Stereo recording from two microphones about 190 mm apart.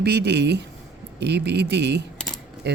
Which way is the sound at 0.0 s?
60° right (ahead or behind).